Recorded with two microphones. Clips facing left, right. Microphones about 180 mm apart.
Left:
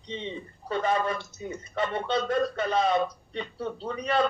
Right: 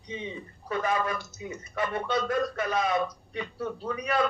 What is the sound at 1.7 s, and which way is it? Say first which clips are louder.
A man's voice: left 1 dB; 25° left (ahead or behind).